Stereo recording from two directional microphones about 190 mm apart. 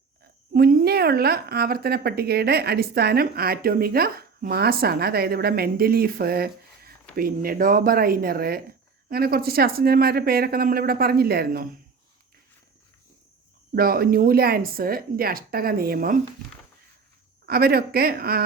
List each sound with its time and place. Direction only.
0.5 s speech: 50° right (ahead or behind)
13.7 s speech: 50° right (ahead or behind)
17.4 s speech: 55° right (ahead or behind)